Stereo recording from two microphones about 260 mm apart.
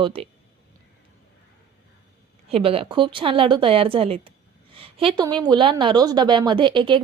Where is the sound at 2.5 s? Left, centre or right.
Right.